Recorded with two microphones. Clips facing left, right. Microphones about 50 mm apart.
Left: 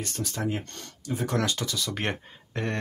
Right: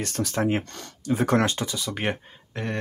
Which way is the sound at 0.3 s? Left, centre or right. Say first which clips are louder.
Right 7 dB; right.